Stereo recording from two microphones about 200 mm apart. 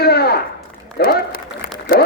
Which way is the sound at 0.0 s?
50° left (ahead or behind).